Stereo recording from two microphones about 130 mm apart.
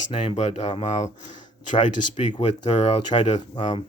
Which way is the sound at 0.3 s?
60° left (ahead or behind).